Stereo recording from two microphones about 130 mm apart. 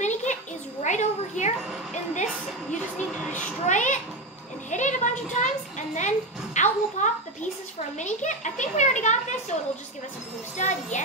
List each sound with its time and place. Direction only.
0.0 s a sound: 70° left (ahead or behind)
0.8 s a child's voice: 65° left (ahead or behind)
3.6 s a child's voice: 70° left (ahead or behind)
10.6 s a child's voice: 65° left (ahead or behind)